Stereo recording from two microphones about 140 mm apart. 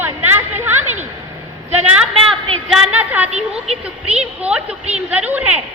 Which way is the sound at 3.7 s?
50° right (ahead or behind).